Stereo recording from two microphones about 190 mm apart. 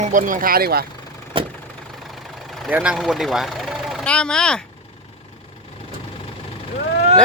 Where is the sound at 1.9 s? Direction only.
Centre (ahead or behind).